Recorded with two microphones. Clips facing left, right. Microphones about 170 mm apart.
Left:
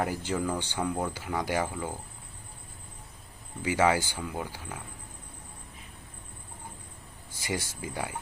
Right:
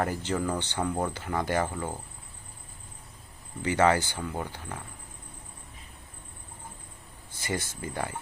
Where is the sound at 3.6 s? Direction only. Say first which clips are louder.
Right 2 dB; 10° left (ahead or behind).